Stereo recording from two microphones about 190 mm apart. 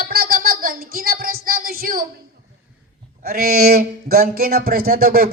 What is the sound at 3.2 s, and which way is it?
Speech, 50° right (ahead or behind).